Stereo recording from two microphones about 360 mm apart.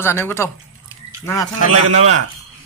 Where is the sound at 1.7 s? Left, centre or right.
Right.